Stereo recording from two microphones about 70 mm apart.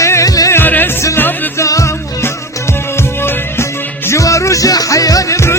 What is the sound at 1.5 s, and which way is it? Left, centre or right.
Music, left.